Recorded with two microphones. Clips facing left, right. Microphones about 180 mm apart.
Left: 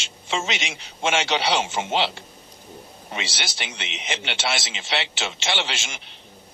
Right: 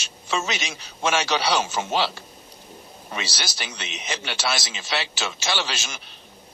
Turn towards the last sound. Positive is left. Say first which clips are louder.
# even
turn(degrees=20)  # may be behind; listen again after turning